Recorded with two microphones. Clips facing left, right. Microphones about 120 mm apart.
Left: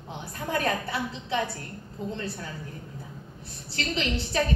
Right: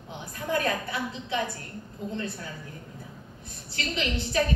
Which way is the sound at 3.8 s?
35° left (ahead or behind).